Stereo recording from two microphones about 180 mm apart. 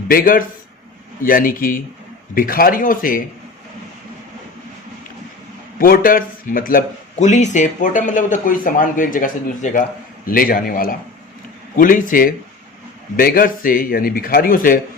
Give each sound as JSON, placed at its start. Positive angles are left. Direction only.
{"t": 0.1, "sound": "speech", "side_deg": 55}
{"t": 5.8, "sound": "speech", "side_deg": 50}